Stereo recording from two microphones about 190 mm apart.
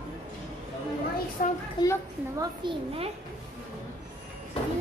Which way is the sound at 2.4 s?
30° right (ahead or behind).